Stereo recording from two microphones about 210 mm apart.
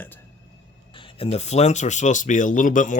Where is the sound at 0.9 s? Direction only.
25° left (ahead or behind).